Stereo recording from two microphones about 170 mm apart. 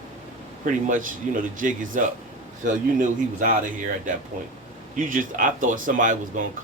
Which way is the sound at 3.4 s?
50° right (ahead or behind).